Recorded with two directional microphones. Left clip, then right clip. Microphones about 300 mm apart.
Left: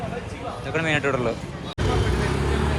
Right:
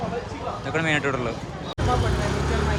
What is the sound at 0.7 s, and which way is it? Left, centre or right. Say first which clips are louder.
Speech: left 1 dB; centre.